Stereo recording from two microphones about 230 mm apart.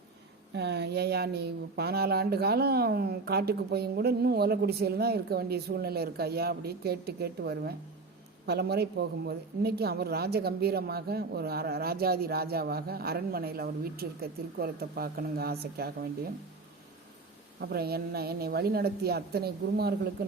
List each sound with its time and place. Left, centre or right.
0.5 s speech: right
17.6 s speech: right